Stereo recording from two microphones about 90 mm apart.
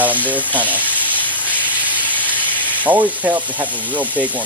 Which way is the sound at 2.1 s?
20° left (ahead or behind).